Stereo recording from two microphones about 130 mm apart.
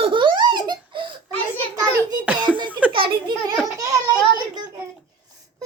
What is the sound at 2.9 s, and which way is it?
Giggle, 40° right (ahead or behind).